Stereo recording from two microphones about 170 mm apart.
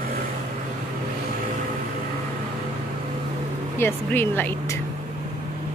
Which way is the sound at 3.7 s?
15° left (ahead or behind).